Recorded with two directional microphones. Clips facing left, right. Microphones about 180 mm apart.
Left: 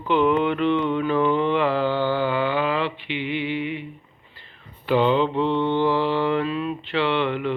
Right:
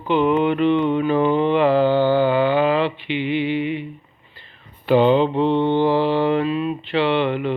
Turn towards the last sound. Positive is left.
turn(degrees=-20)  # may be behind; listen again after turning